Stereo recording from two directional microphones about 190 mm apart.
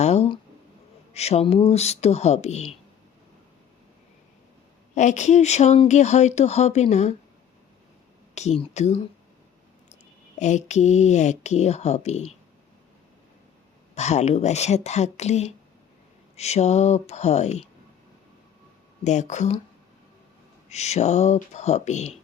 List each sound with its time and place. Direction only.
0.0 s a sound: 35° left (ahead or behind)
1.1 s speech: 35° left (ahead or behind)
4.9 s speech: 40° left (ahead or behind)
8.4 s speech: 35° left (ahead or behind)
10.4 s speech: 40° left (ahead or behind)
13.9 s speech: 35° left (ahead or behind)
19.0 s speech: 40° left (ahead or behind)
20.7 s speech: 35° left (ahead or behind)